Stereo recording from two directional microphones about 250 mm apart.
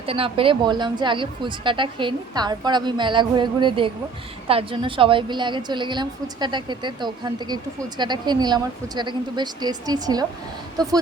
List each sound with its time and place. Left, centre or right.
0.0 s a woman's voice: right